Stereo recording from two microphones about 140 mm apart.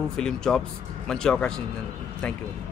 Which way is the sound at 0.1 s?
5° left (ahead or behind).